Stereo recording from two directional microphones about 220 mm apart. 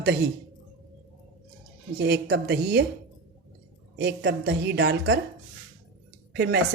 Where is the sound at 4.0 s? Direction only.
50° right (ahead or behind).